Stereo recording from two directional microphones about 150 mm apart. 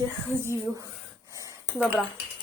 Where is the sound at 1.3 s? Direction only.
20° right (ahead or behind).